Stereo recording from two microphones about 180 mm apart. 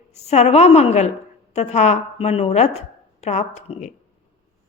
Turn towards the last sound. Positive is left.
turn(degrees=40)  # may be behind; listen again after turning